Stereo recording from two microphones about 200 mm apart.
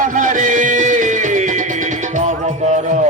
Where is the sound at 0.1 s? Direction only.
40° right (ahead or behind).